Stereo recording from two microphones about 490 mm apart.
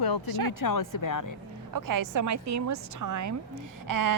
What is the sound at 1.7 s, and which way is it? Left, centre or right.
A woman's voice, right.